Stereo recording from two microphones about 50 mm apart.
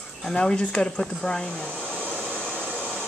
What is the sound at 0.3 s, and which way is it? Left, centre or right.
Speech, centre.